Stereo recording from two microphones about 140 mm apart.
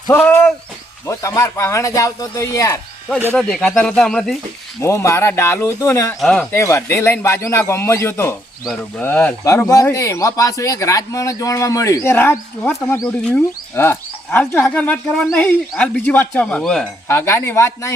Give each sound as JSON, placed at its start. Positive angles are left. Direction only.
{"t": 0.2, "sound": "a sound", "side_deg": 10}
{"t": 1.0, "sound": "speech", "side_deg": 20}
{"t": 3.3, "sound": "speech", "side_deg": 5}
{"t": 4.8, "sound": "speech", "side_deg": 20}
{"t": 6.1, "sound": "speech", "side_deg": 5}
{"t": 6.5, "sound": "speech", "side_deg": 20}
{"t": 17.1, "sound": "speech", "side_deg": 20}